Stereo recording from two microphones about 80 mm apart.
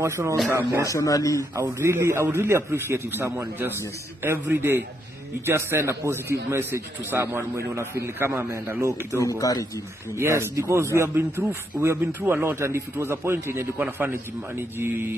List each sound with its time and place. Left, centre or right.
0.0 s a man's voice: right
0.8 s speech: left
1.6 s a man's voice: right
8.8 s speech: right
9.4 s speech: left
10.1 s a man's voice: right